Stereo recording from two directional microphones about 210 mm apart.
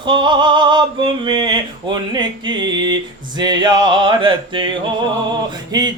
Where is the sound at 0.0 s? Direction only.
20° right (ahead or behind).